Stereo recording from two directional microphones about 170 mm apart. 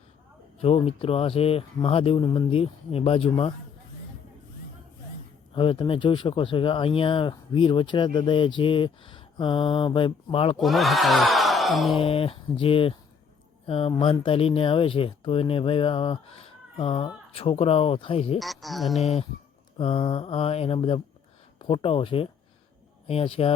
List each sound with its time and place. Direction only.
0.6 s speech: 35° left (ahead or behind)
5.5 s speech: 30° left (ahead or behind)
10.6 s a sound: centre (ahead or behind)
11.9 s speech: 35° left (ahead or behind)
18.3 s speech: centre (ahead or behind)
18.9 s speech: 35° left (ahead or behind)